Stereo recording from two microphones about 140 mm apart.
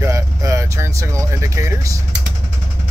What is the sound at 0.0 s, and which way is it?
Vehicle, 20° right (ahead or behind).